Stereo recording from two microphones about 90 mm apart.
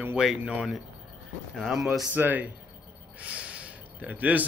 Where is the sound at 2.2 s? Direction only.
20° right (ahead or behind).